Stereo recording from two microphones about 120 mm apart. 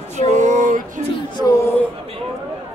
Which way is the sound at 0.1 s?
75° right (ahead or behind).